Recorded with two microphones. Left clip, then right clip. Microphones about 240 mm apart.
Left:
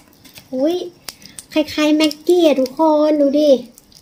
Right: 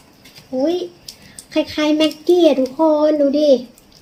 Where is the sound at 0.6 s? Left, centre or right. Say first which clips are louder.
Even; centre.